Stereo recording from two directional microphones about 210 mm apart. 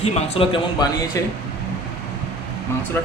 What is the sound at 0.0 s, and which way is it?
Speech, 30° left (ahead or behind).